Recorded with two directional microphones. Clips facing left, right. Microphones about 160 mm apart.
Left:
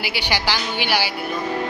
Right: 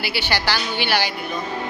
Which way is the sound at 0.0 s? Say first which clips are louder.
Even; 15° left (ahead or behind).